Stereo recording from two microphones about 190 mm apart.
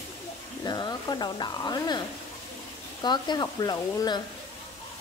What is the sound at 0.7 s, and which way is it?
Speech, 20° left (ahead or behind).